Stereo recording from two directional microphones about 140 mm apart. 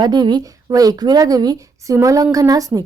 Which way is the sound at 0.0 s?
30° right (ahead or behind).